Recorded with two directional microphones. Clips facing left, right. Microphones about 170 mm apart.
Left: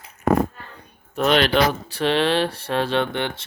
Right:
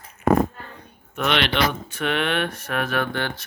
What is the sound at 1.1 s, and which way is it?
Speech, 40° left (ahead or behind).